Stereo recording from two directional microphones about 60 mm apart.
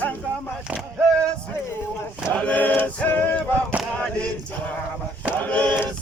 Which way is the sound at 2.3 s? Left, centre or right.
Left.